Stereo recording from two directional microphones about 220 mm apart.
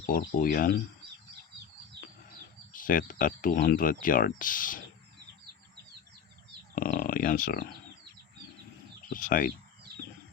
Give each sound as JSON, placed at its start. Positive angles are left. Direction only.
{"t": 0.0, "sound": "speech", "side_deg": 40}
{"t": 2.7, "sound": "speech", "side_deg": 40}
{"t": 6.7, "sound": "speech", "side_deg": 40}
{"t": 9.0, "sound": "speech", "side_deg": 40}